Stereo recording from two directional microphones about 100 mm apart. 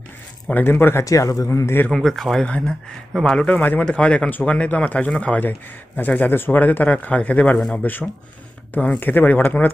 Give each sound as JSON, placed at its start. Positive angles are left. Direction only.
{"t": 0.4, "sound": "speech", "side_deg": 20}
{"t": 1.0, "sound": "speech", "side_deg": 35}
{"t": 1.9, "sound": "speech", "side_deg": 0}